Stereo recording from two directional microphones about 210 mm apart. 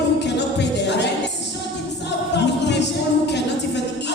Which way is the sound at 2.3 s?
55° left (ahead or behind).